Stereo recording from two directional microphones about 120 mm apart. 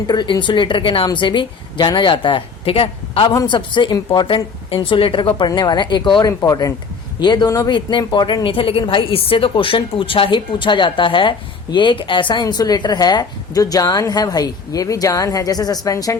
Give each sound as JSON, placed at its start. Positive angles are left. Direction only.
{"t": 0.1, "sound": "a woman's voice", "side_deg": 40}